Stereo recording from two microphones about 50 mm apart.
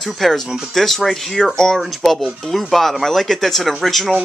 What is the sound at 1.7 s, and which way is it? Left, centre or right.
Speech, centre.